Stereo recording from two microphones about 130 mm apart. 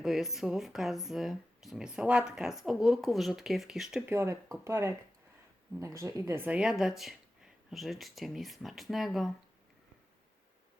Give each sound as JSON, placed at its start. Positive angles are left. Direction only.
{"t": 0.0, "sound": "speech", "side_deg": 0}
{"t": 4.0, "sound": "speech", "side_deg": -20}